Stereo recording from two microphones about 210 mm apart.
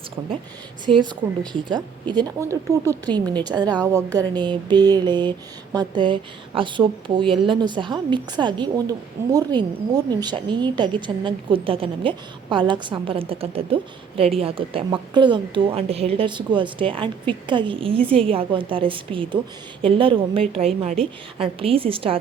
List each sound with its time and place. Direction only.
0.2 s a woman's voice: 20° right (ahead or behind)